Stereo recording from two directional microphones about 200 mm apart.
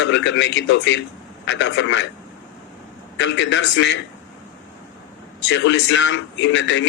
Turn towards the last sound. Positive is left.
turn(degrees=65)  # may be behind; listen again after turning